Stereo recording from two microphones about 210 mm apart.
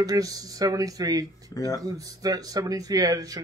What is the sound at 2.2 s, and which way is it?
Speech, 15° right (ahead or behind).